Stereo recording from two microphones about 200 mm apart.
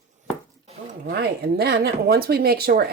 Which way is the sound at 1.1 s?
50° right (ahead or behind).